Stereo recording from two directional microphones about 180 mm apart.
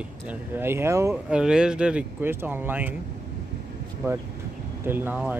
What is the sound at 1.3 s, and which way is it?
Speech, 5° right (ahead or behind).